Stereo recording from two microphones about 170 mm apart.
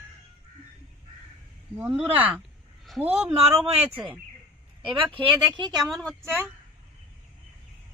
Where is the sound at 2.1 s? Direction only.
10° right (ahead or behind).